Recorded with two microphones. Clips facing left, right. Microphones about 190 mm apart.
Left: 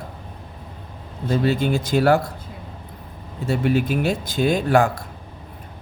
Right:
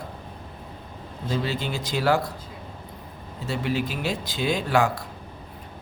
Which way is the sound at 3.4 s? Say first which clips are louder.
Left 7 dB; 55° left (ahead or behind).